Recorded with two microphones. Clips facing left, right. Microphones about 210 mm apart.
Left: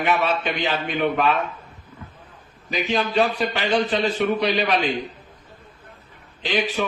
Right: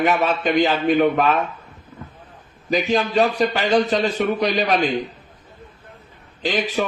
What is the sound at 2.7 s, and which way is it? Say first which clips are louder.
A man's voice: right 4 dB; 40° right (ahead or behind).